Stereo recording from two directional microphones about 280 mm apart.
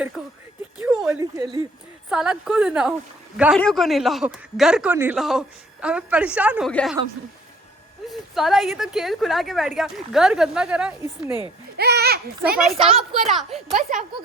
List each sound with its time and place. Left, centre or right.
0.2 s a sound: centre
2.0 s a man's voice: centre
8.0 s a man's voice: centre
11.8 s speech: right
12.8 s a man's voice: centre